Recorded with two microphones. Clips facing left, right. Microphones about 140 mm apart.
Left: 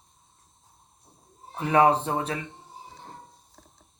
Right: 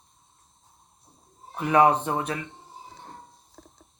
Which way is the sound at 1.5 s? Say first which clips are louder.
Right 1 dB; 30° left (ahead or behind).